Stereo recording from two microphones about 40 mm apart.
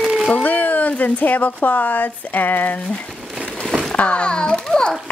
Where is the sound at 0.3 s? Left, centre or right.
Left.